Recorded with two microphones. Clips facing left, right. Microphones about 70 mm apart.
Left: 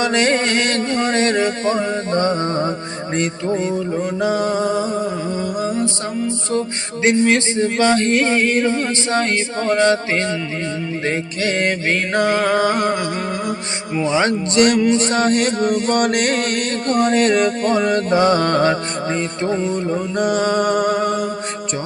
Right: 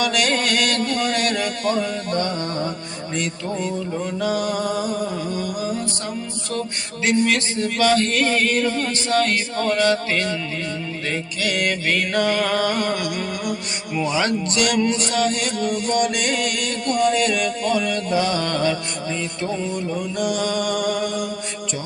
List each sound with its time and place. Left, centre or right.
0.0 s music: left
3.2 s mantra: left
3.8 s music: left
7.0 s music: left
14.9 s mantra: left